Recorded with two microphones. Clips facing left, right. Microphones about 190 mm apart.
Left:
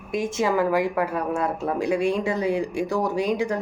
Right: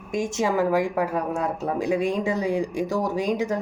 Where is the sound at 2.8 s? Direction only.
40° right (ahead or behind).